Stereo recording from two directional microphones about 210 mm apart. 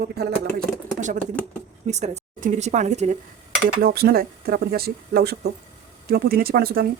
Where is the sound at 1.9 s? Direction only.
35° right (ahead or behind).